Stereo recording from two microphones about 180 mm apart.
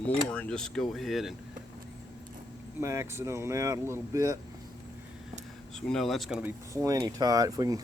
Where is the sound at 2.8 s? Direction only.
15° right (ahead or behind).